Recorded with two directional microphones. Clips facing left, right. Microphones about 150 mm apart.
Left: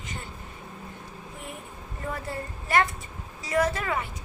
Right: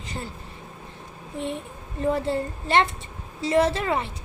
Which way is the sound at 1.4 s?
30° right (ahead or behind).